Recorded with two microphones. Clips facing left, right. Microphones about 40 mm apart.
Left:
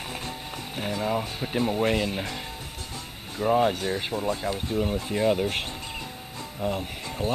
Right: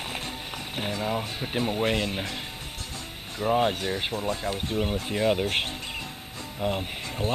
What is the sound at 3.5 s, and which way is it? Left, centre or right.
Speech, centre.